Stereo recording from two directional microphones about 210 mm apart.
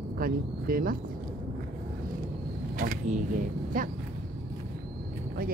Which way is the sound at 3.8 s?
40° right (ahead or behind).